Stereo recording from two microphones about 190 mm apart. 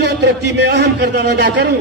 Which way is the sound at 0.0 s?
65° right (ahead or behind).